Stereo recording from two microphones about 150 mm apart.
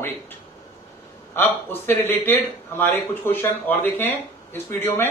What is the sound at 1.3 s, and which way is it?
Speech, 15° left (ahead or behind).